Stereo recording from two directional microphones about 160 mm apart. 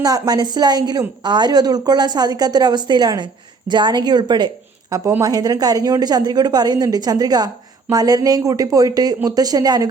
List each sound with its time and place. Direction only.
0.0 s a woman's voice: 25° right (ahead or behind)